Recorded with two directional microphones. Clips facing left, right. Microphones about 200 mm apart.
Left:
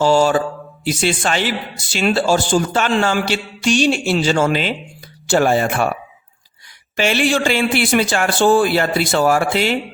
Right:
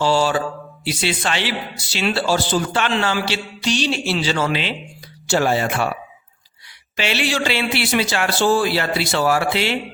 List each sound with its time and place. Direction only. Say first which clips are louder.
0.0 s mantra: left 4 dB; 45° left (ahead or behind)
0.9 s speech: left 4 dB; 45° left (ahead or behind)
6.9 s speech: left 5 dB; 50° left (ahead or behind)